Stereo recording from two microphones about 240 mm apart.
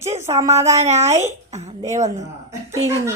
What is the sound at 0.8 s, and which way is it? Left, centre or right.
A woman's voice, right.